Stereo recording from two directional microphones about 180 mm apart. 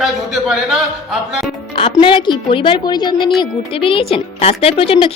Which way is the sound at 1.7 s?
30° left (ahead or behind).